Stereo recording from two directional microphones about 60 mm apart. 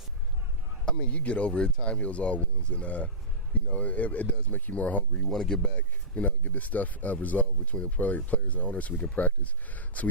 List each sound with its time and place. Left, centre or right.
0.9 s speech: left
5.3 s speech: centre
6.1 s speech: left